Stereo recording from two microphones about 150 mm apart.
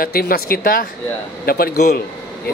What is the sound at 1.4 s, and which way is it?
Speech, 90° left.